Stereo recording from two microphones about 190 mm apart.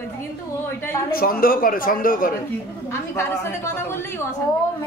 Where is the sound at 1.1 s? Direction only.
50° left (ahead or behind).